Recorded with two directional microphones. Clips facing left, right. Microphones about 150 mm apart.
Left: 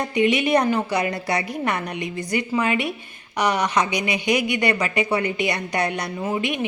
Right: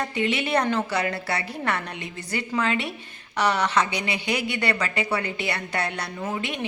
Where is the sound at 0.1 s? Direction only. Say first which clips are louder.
Left 9 dB; 15° left (ahead or behind).